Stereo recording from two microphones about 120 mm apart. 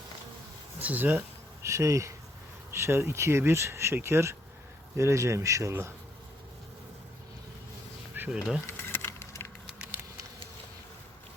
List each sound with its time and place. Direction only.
0.8 s speech: 15° right (ahead or behind)
1.6 s speech: 25° right (ahead or behind)
8.1 s bee: 15° right (ahead or behind)
8.6 s bee: 20° left (ahead or behind)
9.6 s a sound: 10° right (ahead or behind)